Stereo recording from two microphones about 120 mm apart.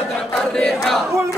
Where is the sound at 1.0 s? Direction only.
20° right (ahead or behind).